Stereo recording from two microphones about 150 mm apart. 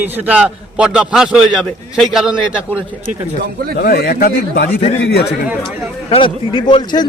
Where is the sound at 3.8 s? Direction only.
90° left.